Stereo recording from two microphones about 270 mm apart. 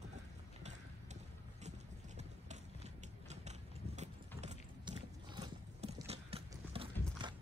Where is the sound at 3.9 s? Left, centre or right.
Right.